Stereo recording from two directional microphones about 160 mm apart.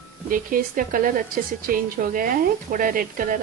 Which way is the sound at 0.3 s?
60° right (ahead or behind).